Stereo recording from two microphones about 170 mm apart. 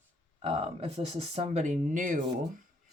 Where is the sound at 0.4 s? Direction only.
35° right (ahead or behind).